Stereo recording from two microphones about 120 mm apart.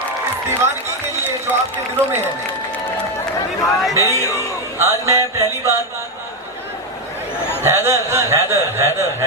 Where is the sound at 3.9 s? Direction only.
25° left (ahead or behind).